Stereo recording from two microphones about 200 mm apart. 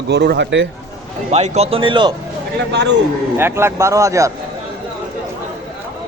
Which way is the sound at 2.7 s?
60° right (ahead or behind).